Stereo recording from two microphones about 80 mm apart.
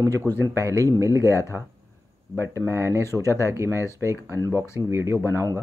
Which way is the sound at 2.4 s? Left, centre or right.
Right.